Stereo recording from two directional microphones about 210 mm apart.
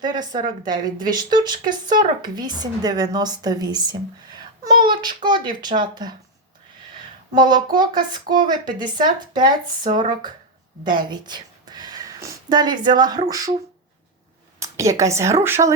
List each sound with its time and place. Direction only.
0.0 s speech: 20° right (ahead or behind)
7.3 s a woman's voice: 20° right (ahead or behind)
14.6 s a woman's voice: 15° right (ahead or behind)